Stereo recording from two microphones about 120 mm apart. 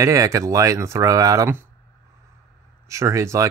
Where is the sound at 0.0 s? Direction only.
25° right (ahead or behind).